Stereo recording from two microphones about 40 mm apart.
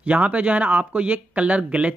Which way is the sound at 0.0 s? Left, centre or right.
Right.